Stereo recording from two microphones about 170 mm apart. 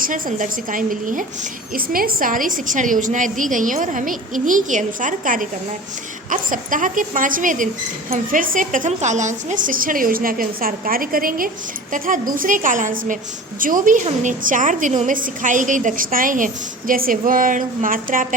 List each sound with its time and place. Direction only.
0.0 s a woman's voice: 50° right (ahead or behind)